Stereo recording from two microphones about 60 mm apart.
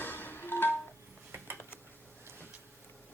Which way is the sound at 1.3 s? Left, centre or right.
Right.